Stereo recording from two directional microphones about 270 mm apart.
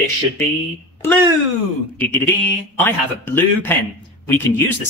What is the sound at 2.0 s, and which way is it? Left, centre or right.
Speech, centre.